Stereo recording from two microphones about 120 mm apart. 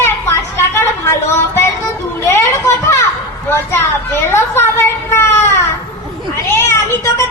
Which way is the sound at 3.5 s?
20° left (ahead or behind).